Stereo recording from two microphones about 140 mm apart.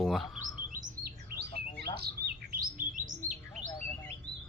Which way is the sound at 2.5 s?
80° right.